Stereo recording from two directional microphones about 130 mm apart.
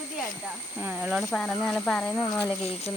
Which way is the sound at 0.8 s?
10° right (ahead or behind).